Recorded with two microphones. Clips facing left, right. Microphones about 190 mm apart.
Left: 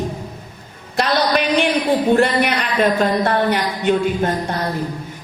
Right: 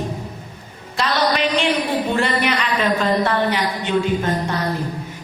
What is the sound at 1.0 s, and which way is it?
A woman's voice, 50° left (ahead or behind).